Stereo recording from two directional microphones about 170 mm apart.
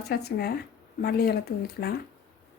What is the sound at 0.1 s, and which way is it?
Speech, 70° left (ahead or behind).